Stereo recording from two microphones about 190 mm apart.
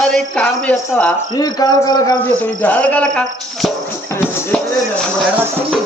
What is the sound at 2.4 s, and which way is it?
Music, 10° left (ahead or behind).